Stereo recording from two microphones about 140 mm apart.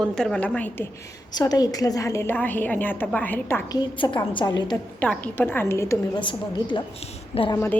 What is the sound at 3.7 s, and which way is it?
A woman's voice, 35° left (ahead or behind).